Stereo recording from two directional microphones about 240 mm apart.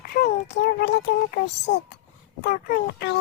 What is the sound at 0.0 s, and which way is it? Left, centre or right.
A child's voice, left.